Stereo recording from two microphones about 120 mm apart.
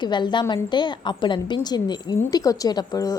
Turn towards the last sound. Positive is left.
turn(degrees=30)  # may be behind; listen again after turning